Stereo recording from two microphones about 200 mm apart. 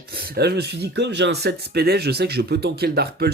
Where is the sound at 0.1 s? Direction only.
50° right (ahead or behind).